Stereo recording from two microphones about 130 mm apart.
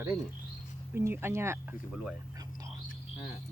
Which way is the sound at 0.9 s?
20° right (ahead or behind).